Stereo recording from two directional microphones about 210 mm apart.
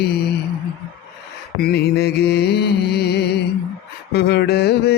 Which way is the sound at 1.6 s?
50° left (ahead or behind).